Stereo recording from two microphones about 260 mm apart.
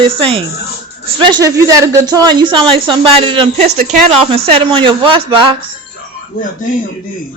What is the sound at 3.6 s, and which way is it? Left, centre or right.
Speech, right.